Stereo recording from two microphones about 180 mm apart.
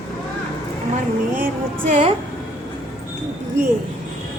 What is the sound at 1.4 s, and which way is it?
Speech, 50° right (ahead or behind).